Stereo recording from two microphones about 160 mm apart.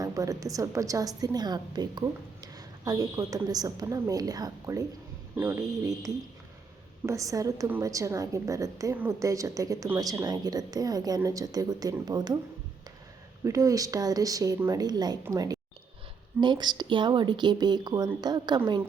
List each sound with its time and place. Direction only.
0.0 s a woman's voice: 20° right (ahead or behind)
13.4 s a woman's voice: 20° right (ahead or behind)